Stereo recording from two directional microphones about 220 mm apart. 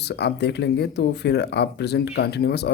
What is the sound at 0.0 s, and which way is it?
Speech, 50° left (ahead or behind).